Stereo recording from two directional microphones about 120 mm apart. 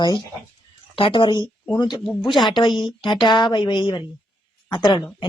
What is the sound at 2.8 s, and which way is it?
Speech, 40° left (ahead or behind).